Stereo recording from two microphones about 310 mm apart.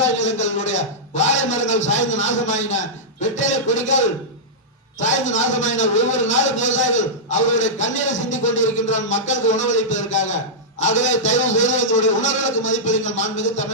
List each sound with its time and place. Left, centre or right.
0.2 s a man's voice: left